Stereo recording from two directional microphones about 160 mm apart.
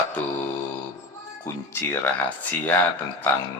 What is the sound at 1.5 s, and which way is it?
Speech, 15° left (ahead or behind).